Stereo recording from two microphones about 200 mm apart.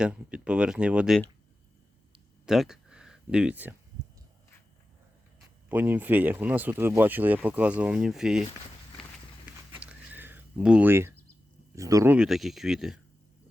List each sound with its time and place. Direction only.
0.0 s speech: 5° right (ahead or behind)
2.5 s speech: centre (ahead or behind)
5.6 s speech: 10° right (ahead or behind)
9.8 s a sound: 10° right (ahead or behind)
11.7 s speech: 15° right (ahead or behind)
12.1 s speech: 5° right (ahead or behind)